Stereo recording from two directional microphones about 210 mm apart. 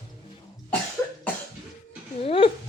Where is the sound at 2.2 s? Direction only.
25° left (ahead or behind).